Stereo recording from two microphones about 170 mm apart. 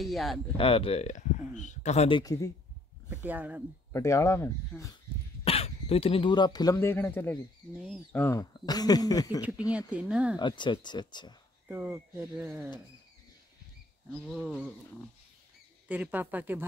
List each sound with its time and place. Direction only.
0.0 s a sound: centre (ahead or behind)
0.6 s speech: 35° left (ahead or behind)
3.1 s speech: 10° right (ahead or behind)
3.9 s speech: 15° left (ahead or behind)
5.4 s speech: 35° left (ahead or behind)
9.4 s speech: 5° right (ahead or behind)
10.4 s speech: 25° left (ahead or behind)
11.6 s speech: 10° right (ahead or behind)
14.2 s a sound: centre (ahead or behind)
15.9 s speech: 10° right (ahead or behind)